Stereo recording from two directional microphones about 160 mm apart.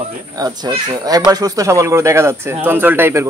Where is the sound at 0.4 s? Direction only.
25° right (ahead or behind).